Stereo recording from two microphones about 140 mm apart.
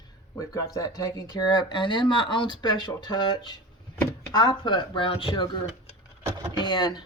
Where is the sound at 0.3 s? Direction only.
25° left (ahead or behind); by 5.5 s 40° left (ahead or behind).